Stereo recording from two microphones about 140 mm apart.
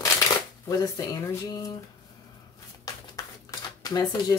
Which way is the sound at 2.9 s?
25° left (ahead or behind).